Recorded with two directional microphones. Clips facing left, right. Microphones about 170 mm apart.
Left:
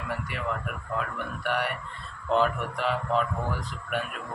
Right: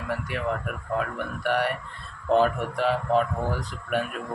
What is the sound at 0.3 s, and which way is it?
Speech, 45° right (ahead or behind).